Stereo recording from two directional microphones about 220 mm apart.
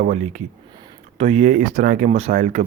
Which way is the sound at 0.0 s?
30° right (ahead or behind).